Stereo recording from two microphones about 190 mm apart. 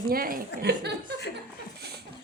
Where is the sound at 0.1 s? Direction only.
50° right (ahead or behind).